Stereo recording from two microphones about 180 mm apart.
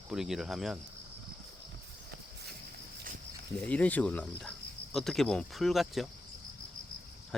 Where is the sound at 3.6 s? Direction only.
5° left (ahead or behind).